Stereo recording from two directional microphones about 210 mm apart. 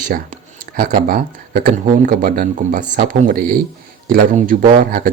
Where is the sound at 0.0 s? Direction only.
40° right (ahead or behind).